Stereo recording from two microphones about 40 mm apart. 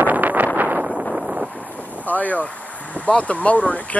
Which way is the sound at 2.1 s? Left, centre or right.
Left.